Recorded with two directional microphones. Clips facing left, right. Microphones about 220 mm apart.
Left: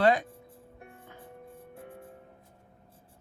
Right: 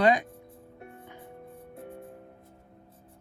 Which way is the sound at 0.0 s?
15° right (ahead or behind).